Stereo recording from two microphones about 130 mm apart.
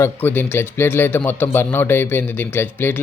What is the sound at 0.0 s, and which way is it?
Speech, 15° left (ahead or behind).